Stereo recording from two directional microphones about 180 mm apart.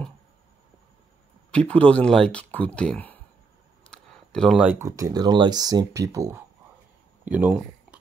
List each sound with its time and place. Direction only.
1.5 s speech: 5° left (ahead or behind)
3.8 s a sound: 5° left (ahead or behind)
4.7 s speech: 15° right (ahead or behind)